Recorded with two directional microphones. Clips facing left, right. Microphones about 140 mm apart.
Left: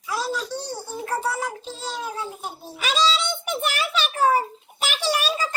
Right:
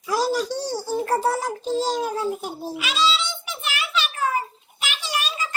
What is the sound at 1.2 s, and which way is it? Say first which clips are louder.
A child's voice: right 5 dB; 40° right (ahead or behind).